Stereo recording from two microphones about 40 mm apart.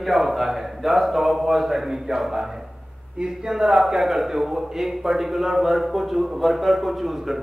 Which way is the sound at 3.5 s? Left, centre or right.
Centre.